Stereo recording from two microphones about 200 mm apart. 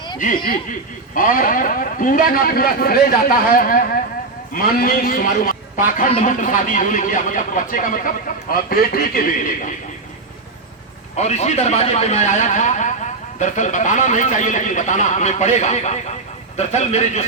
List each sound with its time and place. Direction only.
1.1 s a man's voice: 45° left (ahead or behind)
11.2 s speech: 35° left (ahead or behind)